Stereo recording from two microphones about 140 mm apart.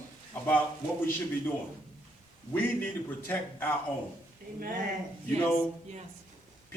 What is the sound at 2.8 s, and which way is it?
Speech, 15° left (ahead or behind).